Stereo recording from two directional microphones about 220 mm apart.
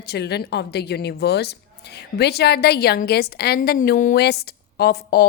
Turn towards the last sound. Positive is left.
turn(degrees=45)  # may be behind; listen again after turning